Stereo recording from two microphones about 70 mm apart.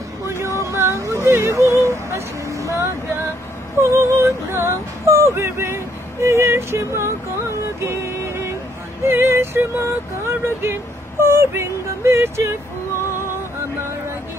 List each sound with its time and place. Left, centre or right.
0.3 s a sound: right
1.8 s vehicle: right
3.8 s music: right
10.2 s speech: right